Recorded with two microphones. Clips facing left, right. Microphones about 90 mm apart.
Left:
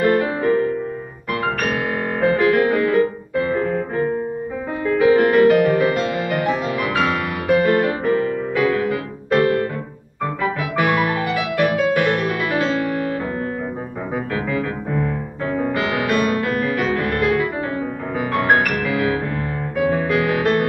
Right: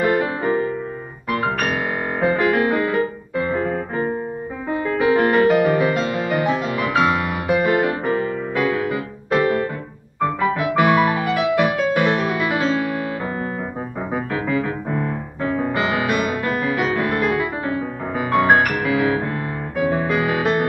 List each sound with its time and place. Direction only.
0.0 s music: 10° right (ahead or behind)
6.9 s music: 10° right (ahead or behind)